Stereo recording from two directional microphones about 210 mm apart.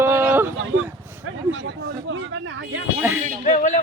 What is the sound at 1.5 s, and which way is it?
Speech, 65° right (ahead or behind).